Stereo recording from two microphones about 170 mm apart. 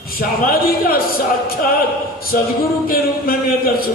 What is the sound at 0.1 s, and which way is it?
Speech, 60° left (ahead or behind).